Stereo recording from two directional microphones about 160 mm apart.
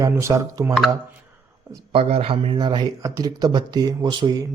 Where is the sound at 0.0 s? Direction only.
20° right (ahead or behind).